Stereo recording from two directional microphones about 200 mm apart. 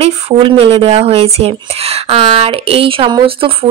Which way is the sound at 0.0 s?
30° right (ahead or behind).